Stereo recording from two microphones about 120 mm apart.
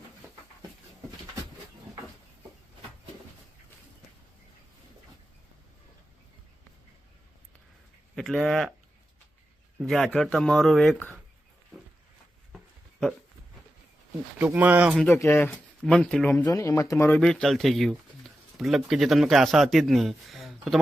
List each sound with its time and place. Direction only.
8.1 s speech: centre (ahead or behind)
9.8 s speech: centre (ahead or behind)
14.3 s speech: 15° right (ahead or behind)
15.1 s speech: 20° left (ahead or behind)
15.8 s speech: 5° left (ahead or behind)
16.5 s speech: 25° left (ahead or behind)
17.1 s speech: 5° left (ahead or behind)